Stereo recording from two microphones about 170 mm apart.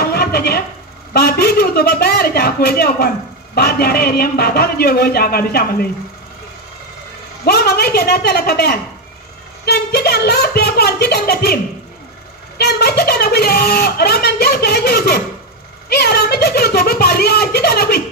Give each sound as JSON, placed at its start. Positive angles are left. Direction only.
{"t": 0.0, "sound": "a sound", "side_deg": 70}
{"t": 1.1, "sound": "a man's voice", "side_deg": 70}
{"t": 7.4, "sound": "speech", "side_deg": 70}
{"t": 12.5, "sound": "speech", "side_deg": 70}